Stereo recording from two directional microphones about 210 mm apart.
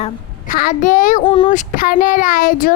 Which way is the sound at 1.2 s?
25° left (ahead or behind).